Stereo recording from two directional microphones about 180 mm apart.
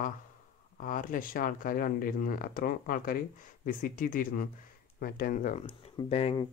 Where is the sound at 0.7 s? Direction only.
50° left (ahead or behind).